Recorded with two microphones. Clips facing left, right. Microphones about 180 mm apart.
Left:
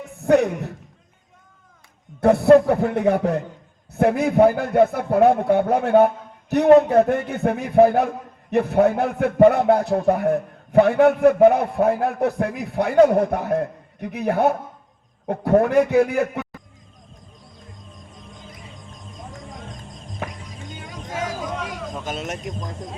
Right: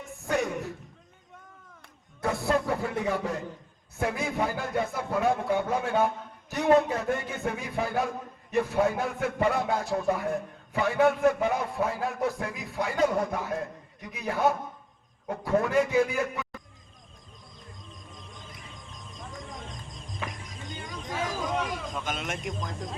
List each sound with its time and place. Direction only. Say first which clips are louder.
0.3 s a man's voice: left 11 dB; 60° left (ahead or behind)
2.2 s a man's voice: left 14 dB; 60° left (ahead or behind)
22.0 s speech: left 4 dB; 40° left (ahead or behind)